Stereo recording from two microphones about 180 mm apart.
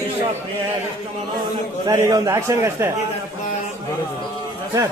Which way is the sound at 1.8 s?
20° right (ahead or behind).